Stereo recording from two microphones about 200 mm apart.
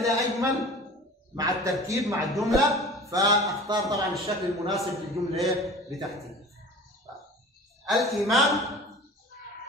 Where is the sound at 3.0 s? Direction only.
15° right (ahead or behind).